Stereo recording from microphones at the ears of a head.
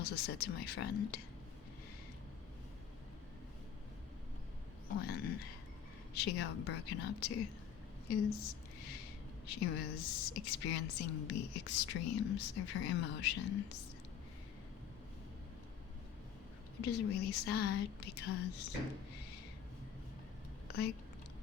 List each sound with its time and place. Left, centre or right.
0.0 s a woman's voice: left
4.9 s a woman's voice: left
8.0 s a sound: left
9.5 s a woman's voice: left
16.7 s a woman's voice: left